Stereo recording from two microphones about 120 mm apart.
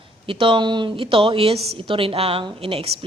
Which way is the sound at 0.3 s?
45° right (ahead or behind).